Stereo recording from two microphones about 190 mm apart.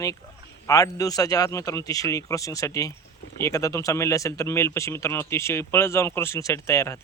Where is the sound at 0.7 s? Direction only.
20° left (ahead or behind).